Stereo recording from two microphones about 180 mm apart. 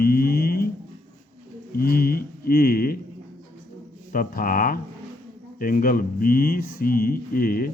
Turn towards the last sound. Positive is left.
turn(degrees=55)  # may be behind; listen again after turning